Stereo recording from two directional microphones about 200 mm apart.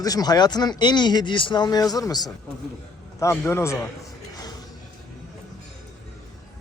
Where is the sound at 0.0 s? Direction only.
20° left (ahead or behind).